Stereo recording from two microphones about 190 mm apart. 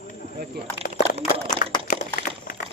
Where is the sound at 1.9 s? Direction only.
45° left (ahead or behind).